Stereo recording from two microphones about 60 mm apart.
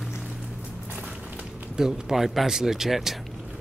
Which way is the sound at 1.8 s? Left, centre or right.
Centre.